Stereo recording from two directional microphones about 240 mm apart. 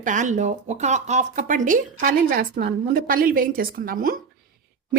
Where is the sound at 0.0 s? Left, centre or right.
Right.